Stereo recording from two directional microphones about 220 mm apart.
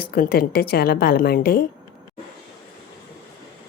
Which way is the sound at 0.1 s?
45° left (ahead or behind).